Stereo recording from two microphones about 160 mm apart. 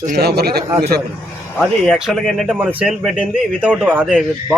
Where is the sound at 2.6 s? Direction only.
10° right (ahead or behind).